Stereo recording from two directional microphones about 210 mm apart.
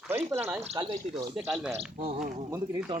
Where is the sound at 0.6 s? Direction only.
25° right (ahead or behind).